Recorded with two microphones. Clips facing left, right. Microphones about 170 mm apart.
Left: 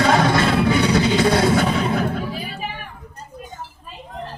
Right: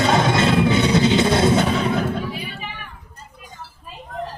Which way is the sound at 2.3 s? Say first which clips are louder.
Left 1 dB; 40° left (ahead or behind).